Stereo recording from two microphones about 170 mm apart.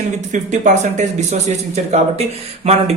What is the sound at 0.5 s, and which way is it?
Speech, 45° right (ahead or behind).